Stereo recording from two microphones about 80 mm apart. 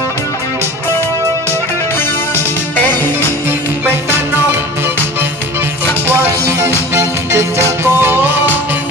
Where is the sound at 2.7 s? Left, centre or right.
Left.